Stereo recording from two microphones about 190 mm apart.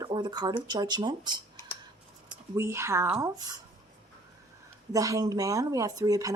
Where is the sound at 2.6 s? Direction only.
15° right (ahead or behind).